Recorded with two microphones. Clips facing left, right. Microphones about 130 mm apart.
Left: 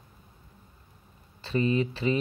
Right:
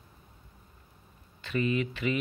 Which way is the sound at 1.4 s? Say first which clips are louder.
Left 3 dB; 30° left (ahead or behind).